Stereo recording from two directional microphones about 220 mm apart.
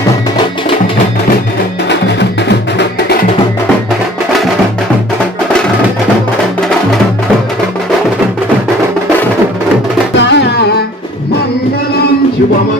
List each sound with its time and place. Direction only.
1.9 s music: 50° left (ahead or behind)
10.2 s music: 55° left (ahead or behind)